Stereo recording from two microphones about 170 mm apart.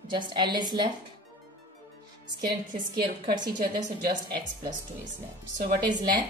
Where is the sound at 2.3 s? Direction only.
65° right (ahead or behind).